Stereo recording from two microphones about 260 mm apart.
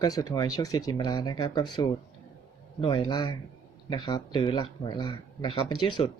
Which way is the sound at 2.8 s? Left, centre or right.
Centre.